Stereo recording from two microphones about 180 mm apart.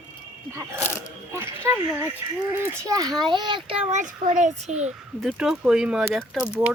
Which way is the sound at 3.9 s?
40° right (ahead or behind).